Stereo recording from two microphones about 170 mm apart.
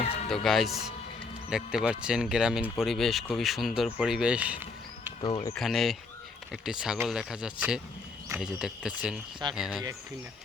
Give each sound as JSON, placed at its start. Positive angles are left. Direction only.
{"t": 0.4, "sound": "speech", "side_deg": 0}
{"t": 5.2, "sound": "speech", "side_deg": 25}
{"t": 5.5, "sound": "speech", "side_deg": 0}